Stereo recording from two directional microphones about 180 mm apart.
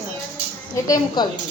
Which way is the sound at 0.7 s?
25° left (ahead or behind).